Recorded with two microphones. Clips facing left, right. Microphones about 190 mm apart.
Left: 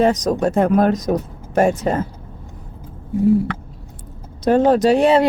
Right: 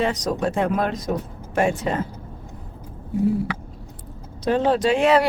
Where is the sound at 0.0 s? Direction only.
45° left (ahead or behind).